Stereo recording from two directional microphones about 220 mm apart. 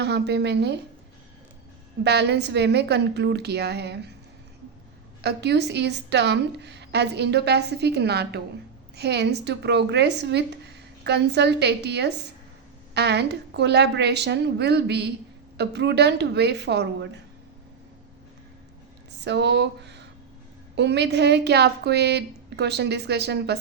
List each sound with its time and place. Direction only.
0.0 s speech: 50° right (ahead or behind)
2.0 s speech: 50° right (ahead or behind)
5.2 s speech: 50° right (ahead or behind)
19.2 s speech: 50° right (ahead or behind)